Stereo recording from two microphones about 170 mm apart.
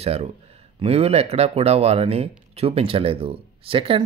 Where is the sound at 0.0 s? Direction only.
35° right (ahead or behind).